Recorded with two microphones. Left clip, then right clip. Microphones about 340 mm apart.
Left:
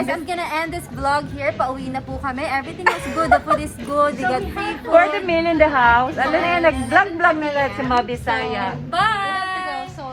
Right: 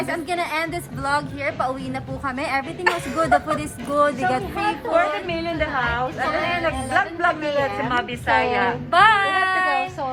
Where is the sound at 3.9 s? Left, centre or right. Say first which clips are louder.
Left 1 dB; centre.